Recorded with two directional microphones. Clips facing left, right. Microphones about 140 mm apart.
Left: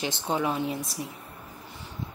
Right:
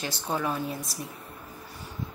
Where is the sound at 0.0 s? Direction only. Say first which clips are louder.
Left 2 dB; 20° left (ahead or behind).